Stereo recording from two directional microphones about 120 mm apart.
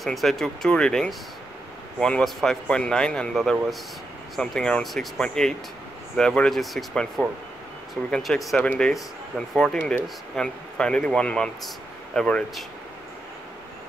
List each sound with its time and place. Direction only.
0.0 s speech: centre (ahead or behind)